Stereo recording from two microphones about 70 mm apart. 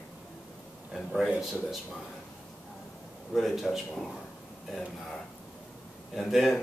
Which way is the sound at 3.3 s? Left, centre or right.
Centre.